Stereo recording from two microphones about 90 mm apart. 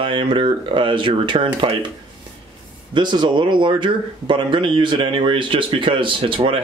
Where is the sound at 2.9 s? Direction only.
55° right (ahead or behind).